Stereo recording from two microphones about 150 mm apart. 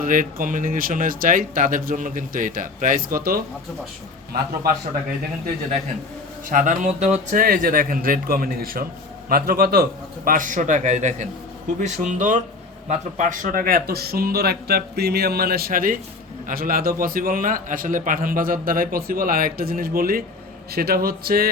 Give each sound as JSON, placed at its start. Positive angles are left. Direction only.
{"t": 0.0, "sound": "speech", "side_deg": -65}
{"t": 6.5, "sound": "a man's voice", "side_deg": -65}
{"t": 10.2, "sound": "a man's voice", "side_deg": -60}
{"t": 20.7, "sound": "speech", "side_deg": -90}